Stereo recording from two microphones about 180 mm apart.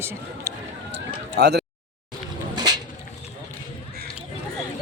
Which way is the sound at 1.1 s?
65° right (ahead or behind).